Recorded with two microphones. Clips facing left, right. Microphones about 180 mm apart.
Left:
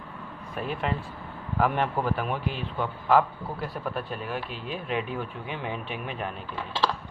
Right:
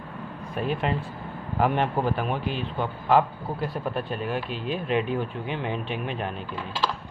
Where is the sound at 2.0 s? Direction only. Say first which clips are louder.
Right 2 dB; 25° right (ahead or behind).